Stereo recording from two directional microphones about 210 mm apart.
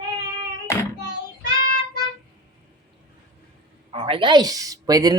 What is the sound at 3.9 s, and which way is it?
A woman's voice, 25° right (ahead or behind).